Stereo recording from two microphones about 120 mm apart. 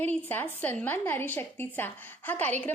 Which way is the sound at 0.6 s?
15° left (ahead or behind).